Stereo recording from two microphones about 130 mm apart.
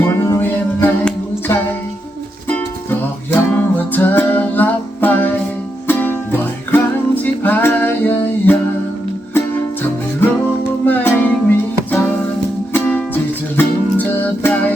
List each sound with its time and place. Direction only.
0.0 s music: 20° left (ahead or behind)
3.5 s music: 15° left (ahead or behind)
10.2 s music: 15° left (ahead or behind)
13.6 s music: 15° left (ahead or behind)